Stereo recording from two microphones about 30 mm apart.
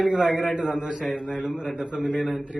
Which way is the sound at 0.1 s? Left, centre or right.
Right.